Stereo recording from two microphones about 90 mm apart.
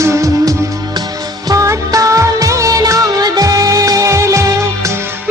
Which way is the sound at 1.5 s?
40° right (ahead or behind).